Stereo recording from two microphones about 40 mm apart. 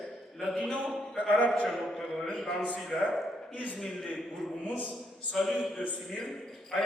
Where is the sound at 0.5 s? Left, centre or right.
Left.